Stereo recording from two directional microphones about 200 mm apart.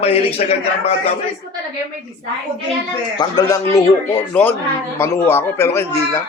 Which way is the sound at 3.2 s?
20° left (ahead or behind).